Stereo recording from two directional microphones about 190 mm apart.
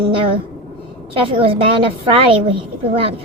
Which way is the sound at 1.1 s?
30° right (ahead or behind).